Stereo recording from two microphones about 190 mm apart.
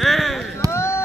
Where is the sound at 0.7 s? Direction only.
15° left (ahead or behind).